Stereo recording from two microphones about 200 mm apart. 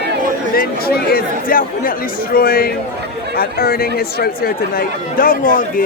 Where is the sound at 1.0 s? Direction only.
45° left (ahead or behind).